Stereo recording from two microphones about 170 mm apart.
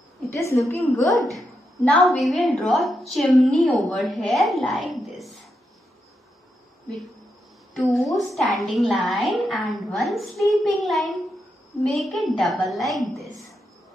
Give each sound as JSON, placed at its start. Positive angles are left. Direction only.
{"t": 0.3, "sound": "a woman's voice", "side_deg": 15}
{"t": 7.7, "sound": "a woman's voice", "side_deg": 0}